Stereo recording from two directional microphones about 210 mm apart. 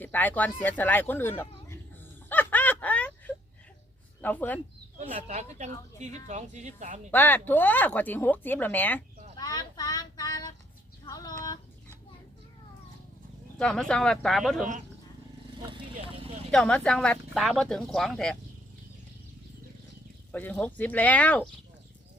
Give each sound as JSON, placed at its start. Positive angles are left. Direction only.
{"t": 0.0, "sound": "speech", "side_deg": 10}
{"t": 0.6, "sound": "a sound", "side_deg": 10}
{"t": 4.2, "sound": "speech", "side_deg": 10}
{"t": 4.9, "sound": "speech", "side_deg": -30}
{"t": 7.1, "sound": "speech", "side_deg": 10}
{"t": 9.4, "sound": "child singing", "side_deg": 20}
{"t": 13.6, "sound": "speech", "side_deg": 5}
{"t": 15.7, "sound": "vehicle", "side_deg": -25}
{"t": 16.5, "sound": "speech", "side_deg": 5}
{"t": 20.3, "sound": "speech", "side_deg": 5}